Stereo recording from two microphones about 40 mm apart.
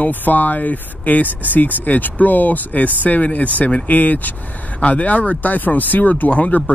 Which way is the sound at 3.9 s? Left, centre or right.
Left.